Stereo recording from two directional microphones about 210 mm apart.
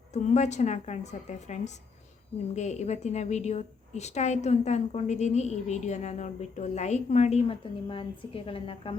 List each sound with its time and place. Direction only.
0.1 s a woman's voice: 35° left (ahead or behind)